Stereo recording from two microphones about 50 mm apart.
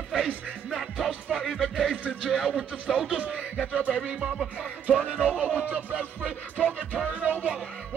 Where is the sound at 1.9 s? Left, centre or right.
Right.